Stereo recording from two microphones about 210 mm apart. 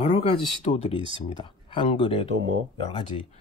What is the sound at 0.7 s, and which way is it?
Speech, 30° left (ahead or behind).